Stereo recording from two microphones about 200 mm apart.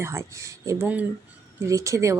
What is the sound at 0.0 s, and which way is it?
A woman's voice, 15° right (ahead or behind).